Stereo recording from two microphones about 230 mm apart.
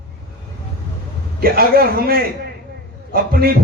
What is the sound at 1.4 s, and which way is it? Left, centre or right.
Mantra, right.